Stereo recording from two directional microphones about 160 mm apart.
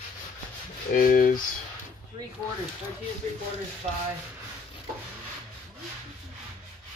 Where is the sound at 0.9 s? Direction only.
60° left (ahead or behind).